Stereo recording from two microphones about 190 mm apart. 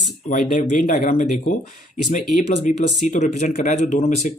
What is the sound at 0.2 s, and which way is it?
Speech, 45° left (ahead or behind).